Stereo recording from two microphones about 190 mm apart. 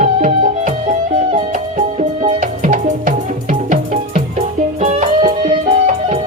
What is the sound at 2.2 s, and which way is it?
Music, 45° right (ahead or behind).